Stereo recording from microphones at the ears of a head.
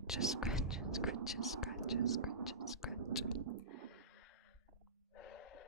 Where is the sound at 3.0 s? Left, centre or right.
Right.